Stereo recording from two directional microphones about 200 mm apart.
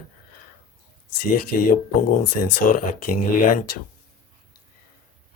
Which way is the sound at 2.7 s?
45° left (ahead or behind).